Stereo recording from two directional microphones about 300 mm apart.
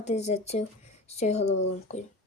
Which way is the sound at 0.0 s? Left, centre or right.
Left.